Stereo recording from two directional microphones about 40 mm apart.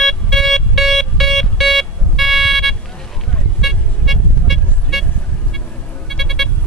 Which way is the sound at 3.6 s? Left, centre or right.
Centre.